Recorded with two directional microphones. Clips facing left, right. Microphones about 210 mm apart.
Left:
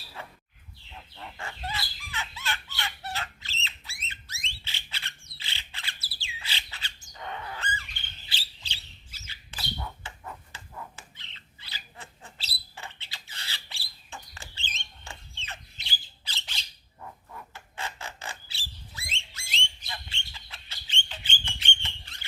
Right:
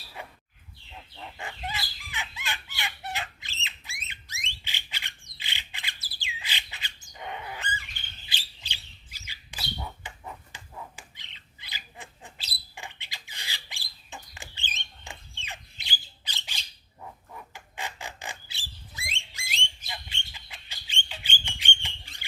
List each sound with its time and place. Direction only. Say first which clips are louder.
0.2 s bird: right 1 dB; 15° right (ahead or behind)
1.4 s fowl: even; 15° right (ahead or behind)
8.3 s bird: right 1 dB; 15° right (ahead or behind)
15.0 s squawk: even; 15° right (ahead or behind)
17.0 s a sound: even; 15° right (ahead or behind)
19.9 s bird: even; 15° right (ahead or behind)